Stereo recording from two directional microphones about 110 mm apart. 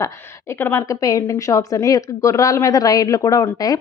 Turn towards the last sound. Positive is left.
turn(degrees=30)  # may be behind; listen again after turning